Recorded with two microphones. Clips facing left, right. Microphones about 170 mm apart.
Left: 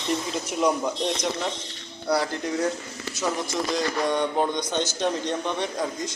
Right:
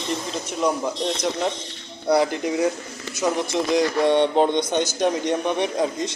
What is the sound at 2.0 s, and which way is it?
A man's voice, 20° right (ahead or behind).